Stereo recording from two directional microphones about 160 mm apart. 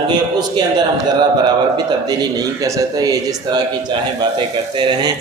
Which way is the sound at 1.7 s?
25° right (ahead or behind).